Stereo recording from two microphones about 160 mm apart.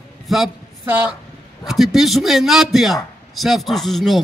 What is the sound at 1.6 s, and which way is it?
A man's voice, centre (ahead or behind).